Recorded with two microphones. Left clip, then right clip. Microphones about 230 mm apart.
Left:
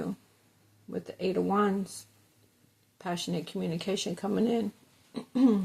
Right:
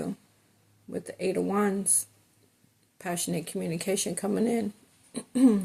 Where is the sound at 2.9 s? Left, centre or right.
Right.